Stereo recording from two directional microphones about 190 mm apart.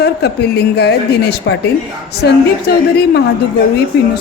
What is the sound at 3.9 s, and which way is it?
Speech, 60° left (ahead or behind).